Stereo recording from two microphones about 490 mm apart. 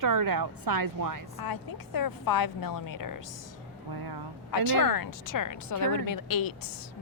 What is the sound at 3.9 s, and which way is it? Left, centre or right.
Speech, right.